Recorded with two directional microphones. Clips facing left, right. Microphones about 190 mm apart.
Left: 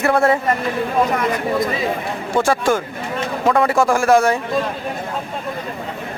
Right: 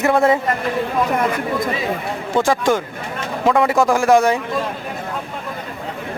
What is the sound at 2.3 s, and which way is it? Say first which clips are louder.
Speech: even; 15° right (ahead or behind).